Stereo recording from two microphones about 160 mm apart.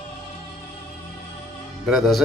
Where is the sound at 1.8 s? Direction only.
Centre (ahead or behind).